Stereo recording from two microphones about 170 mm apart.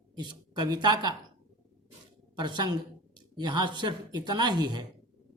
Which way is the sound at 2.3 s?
25° right (ahead or behind).